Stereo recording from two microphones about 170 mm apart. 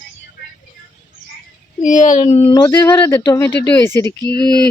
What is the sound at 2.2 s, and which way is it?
Speech, 35° left (ahead or behind).